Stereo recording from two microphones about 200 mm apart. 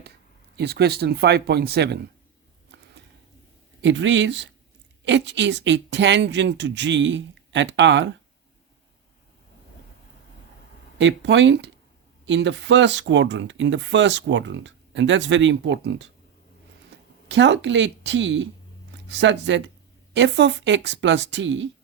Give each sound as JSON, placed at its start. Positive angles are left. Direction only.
{"t": 0.5, "sound": "speech", "side_deg": -55}
{"t": 2.7, "sound": "a sound", "side_deg": -60}
{"t": 3.8, "sound": "speech", "side_deg": -65}
{"t": 10.9, "sound": "speech", "side_deg": -60}
{"t": 17.2, "sound": "speech", "side_deg": -60}